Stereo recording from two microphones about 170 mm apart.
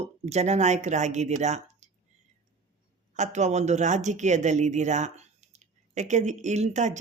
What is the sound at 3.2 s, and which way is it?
Speech, 45° right (ahead or behind).